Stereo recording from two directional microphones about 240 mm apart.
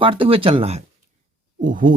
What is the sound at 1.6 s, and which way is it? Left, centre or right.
Owl, right.